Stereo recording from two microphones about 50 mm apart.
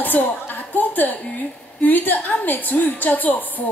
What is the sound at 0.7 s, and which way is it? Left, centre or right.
A woman's voice, left.